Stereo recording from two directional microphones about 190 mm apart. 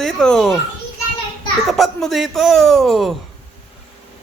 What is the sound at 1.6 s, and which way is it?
A woman's voice, centre (ahead or behind).